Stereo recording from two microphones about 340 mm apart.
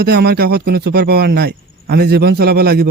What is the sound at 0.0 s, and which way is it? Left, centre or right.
Speech, right.